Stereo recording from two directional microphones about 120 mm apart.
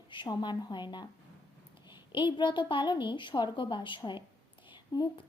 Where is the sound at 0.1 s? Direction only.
40° left (ahead or behind).